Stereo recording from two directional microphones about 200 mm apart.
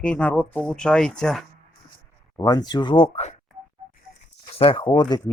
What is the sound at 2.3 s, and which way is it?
Speech, 20° left (ahead or behind).